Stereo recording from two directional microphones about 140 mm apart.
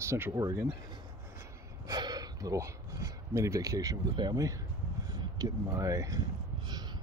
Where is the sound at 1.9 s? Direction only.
30° right (ahead or behind).